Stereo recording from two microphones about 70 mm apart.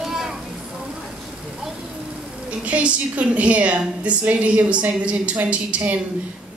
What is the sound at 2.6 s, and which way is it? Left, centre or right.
Speech, centre.